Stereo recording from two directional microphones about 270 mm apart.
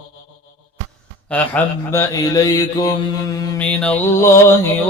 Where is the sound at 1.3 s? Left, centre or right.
Centre.